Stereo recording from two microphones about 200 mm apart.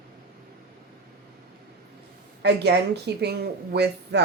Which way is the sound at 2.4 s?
55° right (ahead or behind).